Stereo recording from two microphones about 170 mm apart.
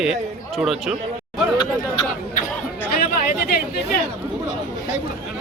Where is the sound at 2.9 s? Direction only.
65° left (ahead or behind).